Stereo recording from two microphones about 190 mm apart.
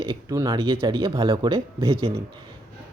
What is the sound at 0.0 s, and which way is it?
Speech, 20° right (ahead or behind).